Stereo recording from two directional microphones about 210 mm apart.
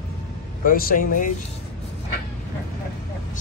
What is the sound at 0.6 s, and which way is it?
Speech, 40° left (ahead or behind).